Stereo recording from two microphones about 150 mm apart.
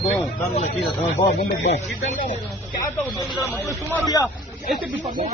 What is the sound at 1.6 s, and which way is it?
Speech, 50° left (ahead or behind).